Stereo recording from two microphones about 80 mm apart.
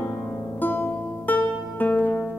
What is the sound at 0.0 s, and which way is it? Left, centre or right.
Music, left.